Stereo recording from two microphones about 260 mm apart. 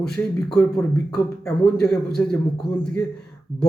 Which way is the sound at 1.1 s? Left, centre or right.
Centre.